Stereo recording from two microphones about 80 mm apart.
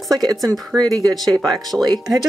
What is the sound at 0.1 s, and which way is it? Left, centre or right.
Speech, right.